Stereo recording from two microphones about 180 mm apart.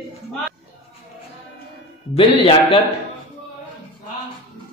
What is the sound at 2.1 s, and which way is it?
Music, 30° left (ahead or behind).